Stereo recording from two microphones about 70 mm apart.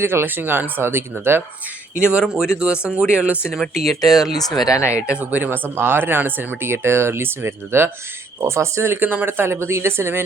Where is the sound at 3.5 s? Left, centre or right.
Centre.